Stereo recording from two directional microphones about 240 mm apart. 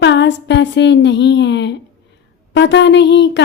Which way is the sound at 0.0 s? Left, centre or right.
Left.